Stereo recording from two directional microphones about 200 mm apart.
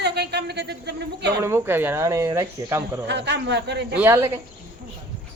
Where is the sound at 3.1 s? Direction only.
60° right (ahead or behind).